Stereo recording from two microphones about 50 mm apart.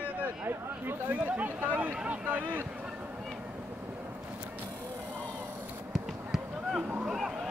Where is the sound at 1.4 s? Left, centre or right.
Right.